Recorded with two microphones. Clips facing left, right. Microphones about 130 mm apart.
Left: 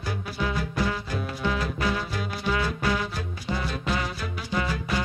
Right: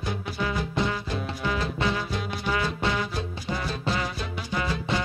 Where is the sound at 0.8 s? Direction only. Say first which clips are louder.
Right 1 dB; 20° right (ahead or behind).